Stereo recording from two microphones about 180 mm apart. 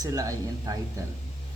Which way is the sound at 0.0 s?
20° right (ahead or behind).